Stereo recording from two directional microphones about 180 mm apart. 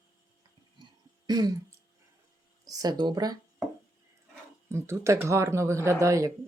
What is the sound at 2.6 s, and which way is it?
Speech, 20° right (ahead or behind).